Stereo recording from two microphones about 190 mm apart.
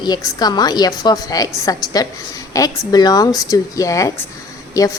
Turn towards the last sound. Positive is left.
turn(degrees=15)  # may be behind; listen again after turning